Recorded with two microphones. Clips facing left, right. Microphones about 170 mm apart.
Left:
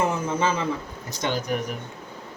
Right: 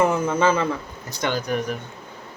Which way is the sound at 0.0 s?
60° right (ahead or behind).